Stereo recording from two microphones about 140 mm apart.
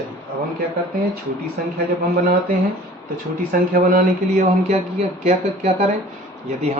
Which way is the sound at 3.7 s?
80° right.